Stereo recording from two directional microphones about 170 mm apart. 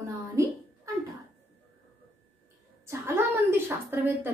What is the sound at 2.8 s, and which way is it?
A woman's voice, 15° right (ahead or behind).